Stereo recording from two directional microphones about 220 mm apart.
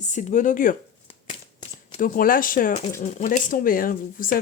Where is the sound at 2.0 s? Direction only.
40° left (ahead or behind).